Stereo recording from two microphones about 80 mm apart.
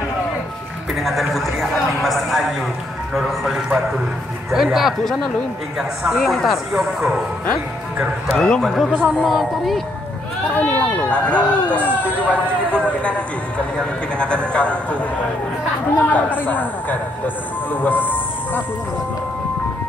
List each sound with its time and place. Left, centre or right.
0.9 s a man's voice: centre
8.4 s a man's voice: centre
10.5 s speech: centre
16.0 s a man's voice: left